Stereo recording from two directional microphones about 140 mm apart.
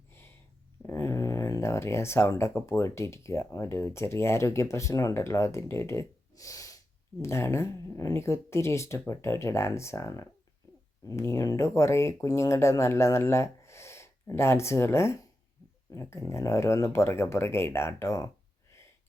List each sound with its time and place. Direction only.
0.9 s speech: 20° left (ahead or behind)